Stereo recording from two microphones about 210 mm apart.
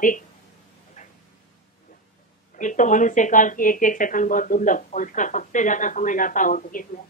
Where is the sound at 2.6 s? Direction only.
35° left (ahead or behind).